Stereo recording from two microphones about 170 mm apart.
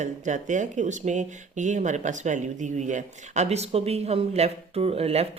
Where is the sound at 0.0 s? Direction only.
45° right (ahead or behind).